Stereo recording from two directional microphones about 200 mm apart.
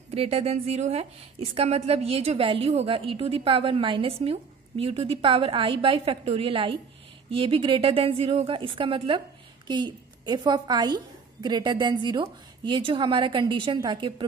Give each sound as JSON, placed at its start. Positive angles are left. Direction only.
{"t": 0.1, "sound": "a woman's voice", "side_deg": -30}